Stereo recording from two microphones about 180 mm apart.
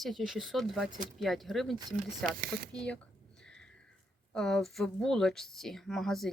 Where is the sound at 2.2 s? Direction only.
60° right (ahead or behind).